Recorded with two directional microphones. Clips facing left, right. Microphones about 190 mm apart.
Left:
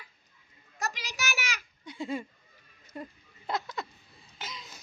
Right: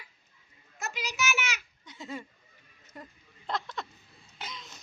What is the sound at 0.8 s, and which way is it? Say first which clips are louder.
Child singing: right 2 dB; 35° left (ahead or behind).